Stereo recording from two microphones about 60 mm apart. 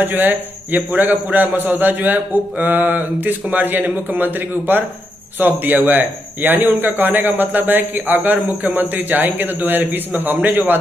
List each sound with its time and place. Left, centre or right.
0.0 s a man's voice: right